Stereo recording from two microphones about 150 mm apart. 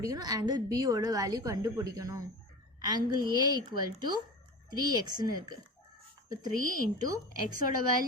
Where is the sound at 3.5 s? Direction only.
30° right (ahead or behind).